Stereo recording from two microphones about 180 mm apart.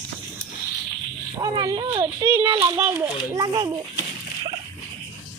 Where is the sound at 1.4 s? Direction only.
20° right (ahead or behind).